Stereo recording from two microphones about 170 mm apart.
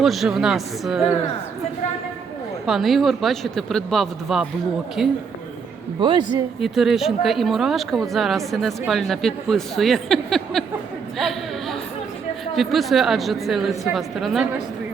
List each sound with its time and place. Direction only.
0.0 s speech: centre (ahead or behind)
2.6 s speech: centre (ahead or behind)
6.0 s a man's voice: 25° right (ahead or behind)
6.6 s speech: centre (ahead or behind)
11.2 s a sound: centre (ahead or behind)
12.5 s speech: centre (ahead or behind)